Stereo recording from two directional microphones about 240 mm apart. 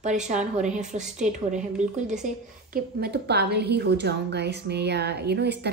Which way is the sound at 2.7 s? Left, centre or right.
Right.